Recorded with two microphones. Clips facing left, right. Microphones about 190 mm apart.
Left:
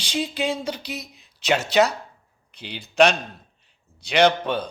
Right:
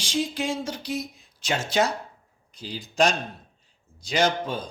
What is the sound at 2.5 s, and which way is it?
A man's voice, 65° left (ahead or behind).